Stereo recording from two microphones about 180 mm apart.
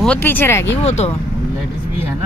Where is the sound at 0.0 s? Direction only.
10° left (ahead or behind).